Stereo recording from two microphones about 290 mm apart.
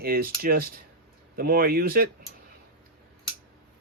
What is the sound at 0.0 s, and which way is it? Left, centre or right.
Speech, right.